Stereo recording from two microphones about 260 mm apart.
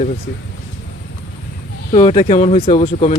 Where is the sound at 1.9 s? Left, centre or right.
Left.